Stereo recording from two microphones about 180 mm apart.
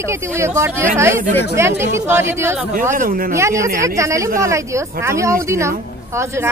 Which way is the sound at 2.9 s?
50° right (ahead or behind).